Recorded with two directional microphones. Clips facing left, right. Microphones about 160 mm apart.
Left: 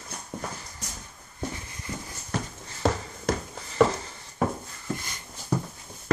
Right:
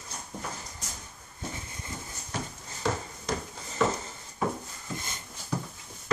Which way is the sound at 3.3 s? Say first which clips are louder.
Left 5 dB; 65° left (ahead or behind).